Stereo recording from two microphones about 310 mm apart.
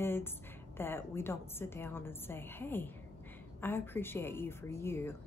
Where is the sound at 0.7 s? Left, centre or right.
Centre.